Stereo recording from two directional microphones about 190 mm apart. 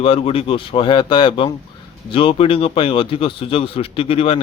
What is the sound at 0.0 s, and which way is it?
A man's voice, 30° left (ahead or behind).